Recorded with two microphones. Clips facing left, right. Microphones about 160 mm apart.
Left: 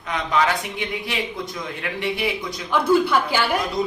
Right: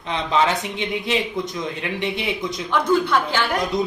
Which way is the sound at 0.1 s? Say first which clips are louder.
Right 1 dB; 25° right (ahead or behind).